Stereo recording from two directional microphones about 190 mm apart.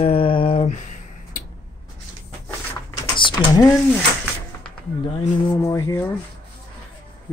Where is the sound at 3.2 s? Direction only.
20° left (ahead or behind).